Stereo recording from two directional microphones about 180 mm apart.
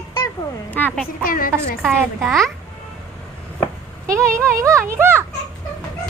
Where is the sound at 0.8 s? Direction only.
10° left (ahead or behind).